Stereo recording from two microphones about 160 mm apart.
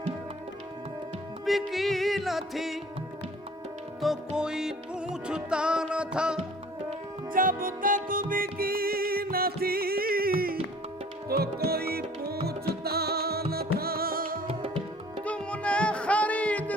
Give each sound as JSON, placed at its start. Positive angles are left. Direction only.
{"t": 1.5, "sound": "music", "side_deg": 0}
{"t": 4.0, "sound": "music", "side_deg": -5}
{"t": 7.3, "sound": "music", "side_deg": -60}
{"t": 15.2, "sound": "music", "side_deg": 5}